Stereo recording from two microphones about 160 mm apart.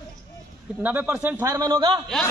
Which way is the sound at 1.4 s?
20° right (ahead or behind).